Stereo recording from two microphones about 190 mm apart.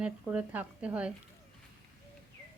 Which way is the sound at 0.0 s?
5° right (ahead or behind).